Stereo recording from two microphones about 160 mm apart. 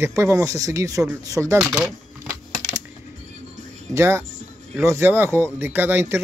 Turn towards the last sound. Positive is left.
turn(degrees=-15)  # may be behind; listen again after turning